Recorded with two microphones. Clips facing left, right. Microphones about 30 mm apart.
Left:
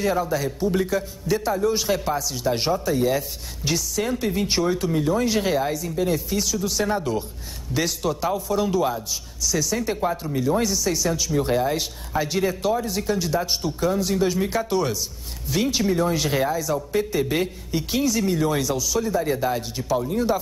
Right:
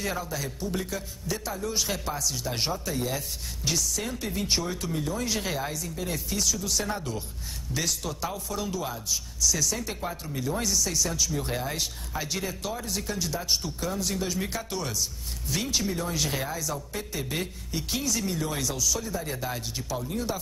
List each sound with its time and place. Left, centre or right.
0.2 s a man's voice: centre